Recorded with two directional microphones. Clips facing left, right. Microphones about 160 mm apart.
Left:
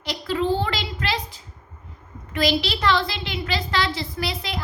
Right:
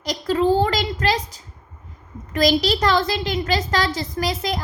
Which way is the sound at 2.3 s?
40° right (ahead or behind).